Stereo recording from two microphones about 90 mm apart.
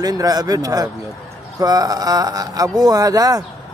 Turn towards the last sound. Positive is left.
turn(degrees=-45)  # may be behind; listen again after turning